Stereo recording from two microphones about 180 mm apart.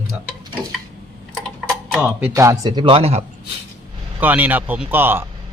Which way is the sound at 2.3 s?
20° right (ahead or behind).